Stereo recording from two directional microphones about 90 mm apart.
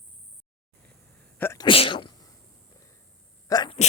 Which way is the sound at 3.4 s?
45° left (ahead or behind).